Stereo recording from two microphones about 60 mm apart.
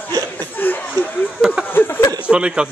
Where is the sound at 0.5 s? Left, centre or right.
Left.